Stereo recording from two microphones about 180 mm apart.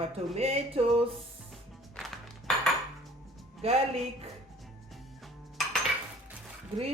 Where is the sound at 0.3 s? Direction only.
35° right (ahead or behind).